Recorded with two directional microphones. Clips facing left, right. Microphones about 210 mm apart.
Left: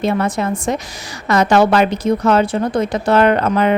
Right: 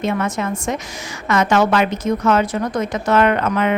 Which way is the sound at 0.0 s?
35° left (ahead or behind).